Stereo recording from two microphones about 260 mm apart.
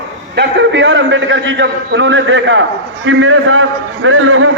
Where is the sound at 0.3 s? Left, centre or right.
Right.